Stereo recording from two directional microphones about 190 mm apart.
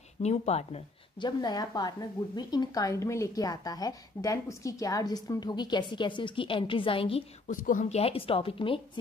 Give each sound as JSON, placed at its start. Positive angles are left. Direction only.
{"t": 0.2, "sound": "speech", "side_deg": 35}
{"t": 7.4, "sound": "speech", "side_deg": 45}